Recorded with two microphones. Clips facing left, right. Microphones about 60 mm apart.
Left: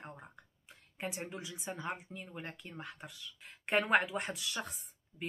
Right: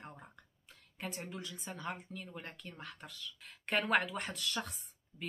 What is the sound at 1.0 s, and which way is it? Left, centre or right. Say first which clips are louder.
Speech: left 2 dB; centre.